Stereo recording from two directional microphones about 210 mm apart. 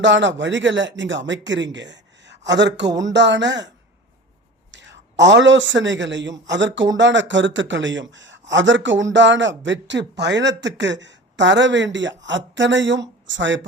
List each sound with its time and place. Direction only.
0.0 s a man's voice: 60° right (ahead or behind)
4.7 s a man's voice: 60° right (ahead or behind)